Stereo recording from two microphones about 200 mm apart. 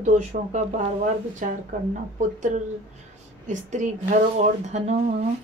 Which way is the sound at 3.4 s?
35° right (ahead or behind).